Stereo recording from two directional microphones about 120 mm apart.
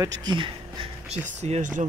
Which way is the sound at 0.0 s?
35° right (ahead or behind).